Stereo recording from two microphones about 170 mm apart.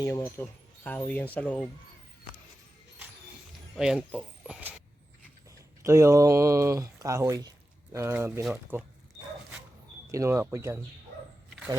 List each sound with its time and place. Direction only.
0.0 s speech: 15° left (ahead or behind)
3.8 s speech: 5° right (ahead or behind)
5.5 s speech: 15° right (ahead or behind)
10.1 s speech: 15° right (ahead or behind)